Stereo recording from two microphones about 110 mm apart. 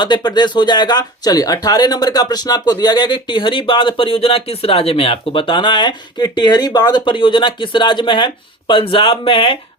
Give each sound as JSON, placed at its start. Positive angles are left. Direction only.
{"t": 0.0, "sound": "speech", "side_deg": 45}